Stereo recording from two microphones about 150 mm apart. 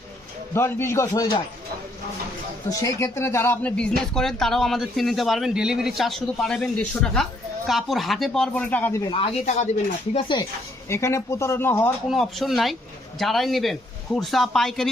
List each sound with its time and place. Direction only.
0.5 s a man's voice: 15° left (ahead or behind)
2.6 s speech: 20° left (ahead or behind)
9.0 s speech: 35° left (ahead or behind)
10.8 s speech: 20° left (ahead or behind)
12.0 s speech: centre (ahead or behind)